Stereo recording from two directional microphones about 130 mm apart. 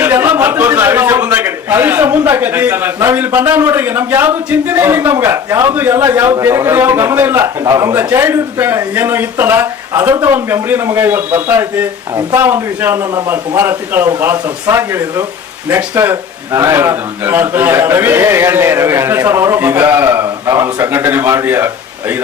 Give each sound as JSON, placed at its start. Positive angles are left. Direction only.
{"t": 0.0, "sound": "a man's voice", "side_deg": -15}